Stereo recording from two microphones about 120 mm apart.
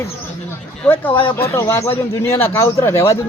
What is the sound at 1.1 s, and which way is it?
Speech, 45° left (ahead or behind).